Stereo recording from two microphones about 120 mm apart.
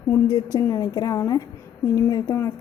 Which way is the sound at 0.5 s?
30° left (ahead or behind).